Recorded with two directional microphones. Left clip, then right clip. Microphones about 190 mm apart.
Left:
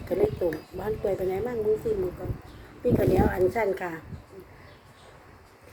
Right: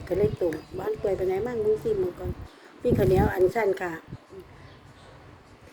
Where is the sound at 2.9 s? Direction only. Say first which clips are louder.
Right 1 dB; 45° right (ahead or behind).